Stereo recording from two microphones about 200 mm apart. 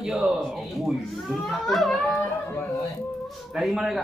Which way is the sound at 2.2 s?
15° left (ahead or behind).